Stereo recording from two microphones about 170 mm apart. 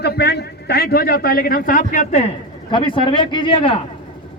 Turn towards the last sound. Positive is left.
turn(degrees=30)  # may be behind; listen again after turning